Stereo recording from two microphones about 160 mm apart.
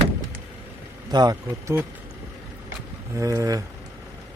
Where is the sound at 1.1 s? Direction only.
25° right (ahead or behind).